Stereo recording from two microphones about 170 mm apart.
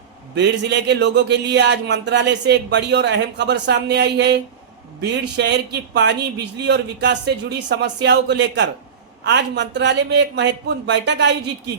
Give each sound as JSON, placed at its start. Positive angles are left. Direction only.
{"t": 0.3, "sound": "speech", "side_deg": -85}
{"t": 6.6, "sound": "speech", "side_deg": -80}